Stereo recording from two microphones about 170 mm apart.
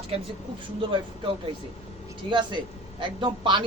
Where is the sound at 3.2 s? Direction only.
30° right (ahead or behind).